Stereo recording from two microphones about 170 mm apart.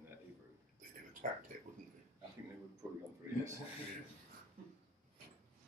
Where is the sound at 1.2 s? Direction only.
55° right (ahead or behind).